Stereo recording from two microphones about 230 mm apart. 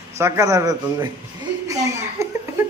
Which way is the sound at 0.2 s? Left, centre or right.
Centre.